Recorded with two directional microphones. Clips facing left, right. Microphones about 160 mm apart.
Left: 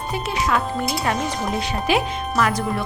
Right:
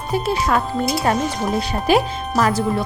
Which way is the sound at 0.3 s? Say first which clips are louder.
Right 1 dB; 40° right (ahead or behind).